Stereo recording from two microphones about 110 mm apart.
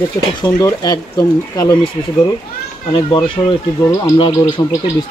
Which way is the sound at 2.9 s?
55° left (ahead or behind).